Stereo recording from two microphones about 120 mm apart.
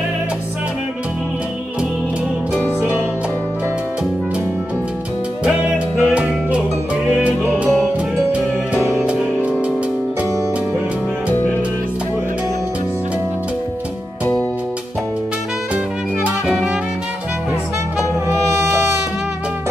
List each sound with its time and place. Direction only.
5.4 s music: 10° right (ahead or behind)
9.0 s music: 10° right (ahead or behind)
16.3 s music: 5° right (ahead or behind)
18.3 s music: 20° right (ahead or behind)